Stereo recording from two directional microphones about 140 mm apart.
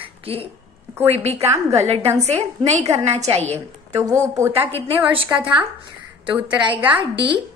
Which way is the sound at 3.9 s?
20° right (ahead or behind).